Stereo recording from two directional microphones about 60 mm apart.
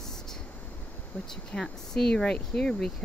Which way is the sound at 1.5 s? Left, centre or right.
Centre.